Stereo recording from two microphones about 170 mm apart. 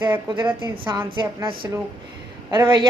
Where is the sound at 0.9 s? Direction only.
25° right (ahead or behind).